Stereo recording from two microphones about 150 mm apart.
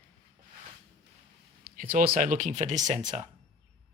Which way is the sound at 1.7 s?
70° right (ahead or behind).